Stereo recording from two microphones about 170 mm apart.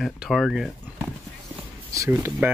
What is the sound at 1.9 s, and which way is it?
Speech, 15° right (ahead or behind).